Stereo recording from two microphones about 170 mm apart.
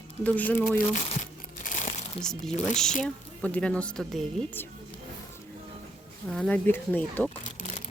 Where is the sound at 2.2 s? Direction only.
5° left (ahead or behind).